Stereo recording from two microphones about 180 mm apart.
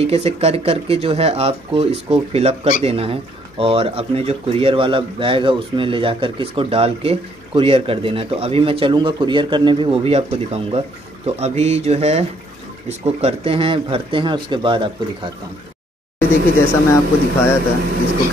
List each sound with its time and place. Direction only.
0.0 s speech: 35° right (ahead or behind)
16.5 s speech: 15° left (ahead or behind)